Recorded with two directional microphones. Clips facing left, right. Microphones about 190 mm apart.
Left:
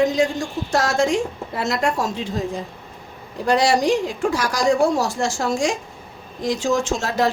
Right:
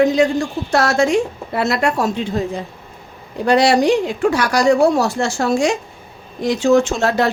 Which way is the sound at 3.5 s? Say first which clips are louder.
Right 4 dB; 65° right (ahead or behind).